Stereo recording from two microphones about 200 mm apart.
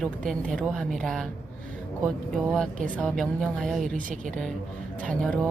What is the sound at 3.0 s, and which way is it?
Speech, centre (ahead or behind).